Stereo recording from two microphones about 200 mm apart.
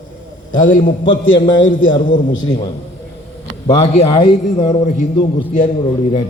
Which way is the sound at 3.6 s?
25° left (ahead or behind).